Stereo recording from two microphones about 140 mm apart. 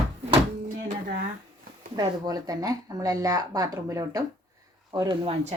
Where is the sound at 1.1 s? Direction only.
90° right.